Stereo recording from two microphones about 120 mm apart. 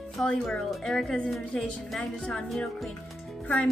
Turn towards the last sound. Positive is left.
turn(degrees=5)  # may be behind; listen again after turning